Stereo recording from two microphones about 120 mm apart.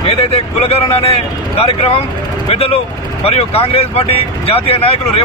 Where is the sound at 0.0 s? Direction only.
55° left (ahead or behind).